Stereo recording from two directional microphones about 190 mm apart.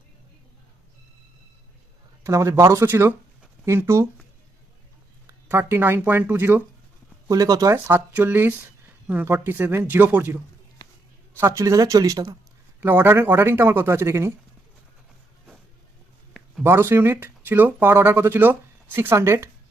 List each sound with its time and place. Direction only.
2.2 s speech: 15° right (ahead or behind)
5.2 s speech: 15° right (ahead or behind)
16.6 s speech: 15° right (ahead or behind)